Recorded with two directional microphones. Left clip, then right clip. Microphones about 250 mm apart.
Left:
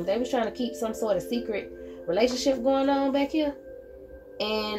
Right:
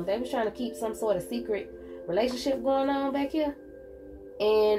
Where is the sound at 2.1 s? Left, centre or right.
Left.